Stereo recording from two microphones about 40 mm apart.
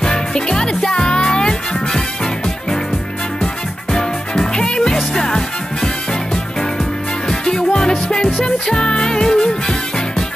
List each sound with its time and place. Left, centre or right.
0.0 s music: centre
3.9 s music: centre
7.2 s music: centre